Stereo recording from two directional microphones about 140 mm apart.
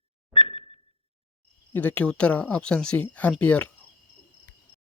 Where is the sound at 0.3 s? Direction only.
40° left (ahead or behind).